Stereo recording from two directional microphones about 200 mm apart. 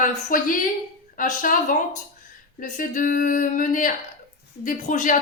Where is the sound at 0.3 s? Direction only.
40° left (ahead or behind).